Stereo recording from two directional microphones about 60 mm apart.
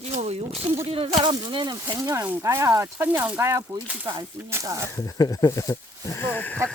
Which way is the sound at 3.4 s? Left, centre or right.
Right.